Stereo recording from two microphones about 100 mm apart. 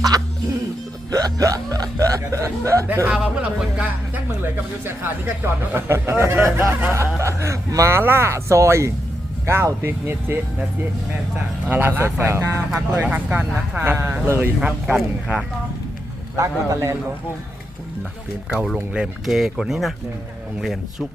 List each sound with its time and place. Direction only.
1.1 s speech: 35° right (ahead or behind)
3.1 s speech: 10° right (ahead or behind); by 12.6 s 25° right (ahead or behind)
12.9 s speech: 15° right (ahead or behind)
14.6 s speech: 10° right (ahead or behind)
16.4 s speech: 30° right (ahead or behind)
18.5 s speech: centre (ahead or behind)